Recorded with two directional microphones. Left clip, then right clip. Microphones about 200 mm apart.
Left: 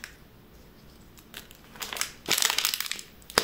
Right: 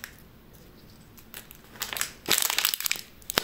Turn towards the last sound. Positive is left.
turn(degrees=-20)  # may be behind; listen again after turning